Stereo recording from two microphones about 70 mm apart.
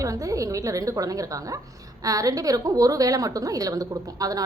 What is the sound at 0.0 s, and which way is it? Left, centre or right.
A woman's voice, right.